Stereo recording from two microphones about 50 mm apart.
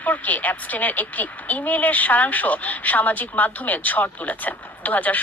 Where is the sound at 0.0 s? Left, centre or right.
Left.